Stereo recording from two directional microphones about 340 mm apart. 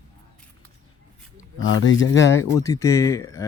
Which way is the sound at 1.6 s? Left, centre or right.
Left.